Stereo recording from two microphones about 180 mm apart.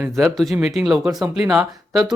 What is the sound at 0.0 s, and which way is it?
Speech, centre (ahead or behind).